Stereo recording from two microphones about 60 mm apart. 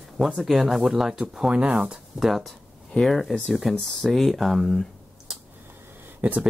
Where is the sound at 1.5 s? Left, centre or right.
Centre.